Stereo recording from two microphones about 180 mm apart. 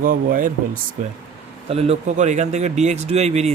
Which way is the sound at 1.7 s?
35° right (ahead or behind).